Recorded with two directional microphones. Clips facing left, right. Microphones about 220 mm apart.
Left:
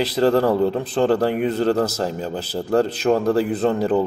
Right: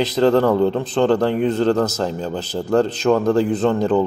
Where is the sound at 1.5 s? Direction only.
35° left (ahead or behind).